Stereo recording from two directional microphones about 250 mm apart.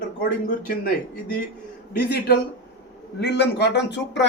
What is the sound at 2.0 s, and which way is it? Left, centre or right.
Speech, left.